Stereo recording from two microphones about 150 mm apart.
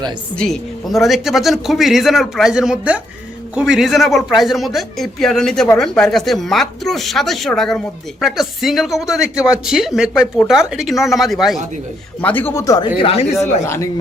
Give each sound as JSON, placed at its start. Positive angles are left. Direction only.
{"t": 0.3, "sound": "speech", "side_deg": 5}
{"t": 12.2, "sound": "speech", "side_deg": 10}
{"t": 13.0, "sound": "speech", "side_deg": 40}